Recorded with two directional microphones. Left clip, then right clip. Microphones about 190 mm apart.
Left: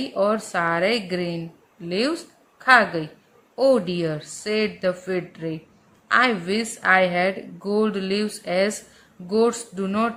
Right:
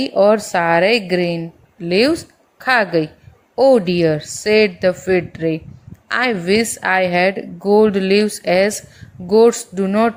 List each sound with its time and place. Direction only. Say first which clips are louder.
0.0 s a woman's voice: right 9 dB; 30° right (ahead or behind)